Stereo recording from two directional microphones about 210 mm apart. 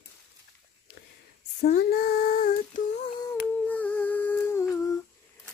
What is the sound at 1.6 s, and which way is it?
Female singing, 50° left (ahead or behind).